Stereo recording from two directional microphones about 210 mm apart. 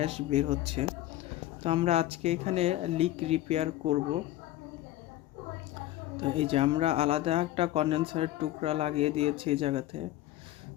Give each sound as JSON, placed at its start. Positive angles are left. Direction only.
{"t": 0.0, "sound": "speech", "side_deg": -30}
{"t": 6.1, "sound": "speech", "side_deg": -25}